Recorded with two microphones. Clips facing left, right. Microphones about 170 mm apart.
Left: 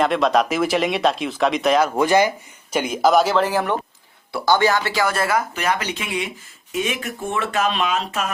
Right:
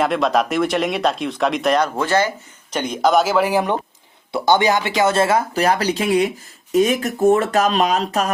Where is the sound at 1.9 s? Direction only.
15° left (ahead or behind).